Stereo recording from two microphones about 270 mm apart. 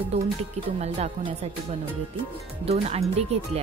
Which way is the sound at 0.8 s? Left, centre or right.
Right.